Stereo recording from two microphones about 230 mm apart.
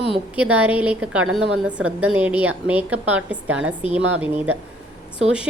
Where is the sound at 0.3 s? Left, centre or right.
Centre.